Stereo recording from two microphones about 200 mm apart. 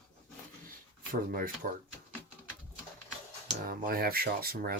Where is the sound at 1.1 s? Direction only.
45° right (ahead or behind).